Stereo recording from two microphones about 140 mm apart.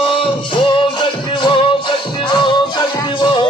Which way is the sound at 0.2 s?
35° left (ahead or behind).